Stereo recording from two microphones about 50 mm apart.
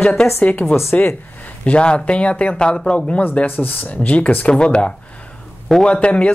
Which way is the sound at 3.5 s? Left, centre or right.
Left.